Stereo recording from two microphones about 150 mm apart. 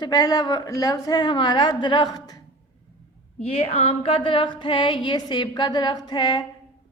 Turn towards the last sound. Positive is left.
turn(degrees=30)  # may be behind; listen again after turning